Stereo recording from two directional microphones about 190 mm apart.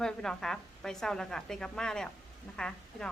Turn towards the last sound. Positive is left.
turn(degrees=5)  # may be behind; listen again after turning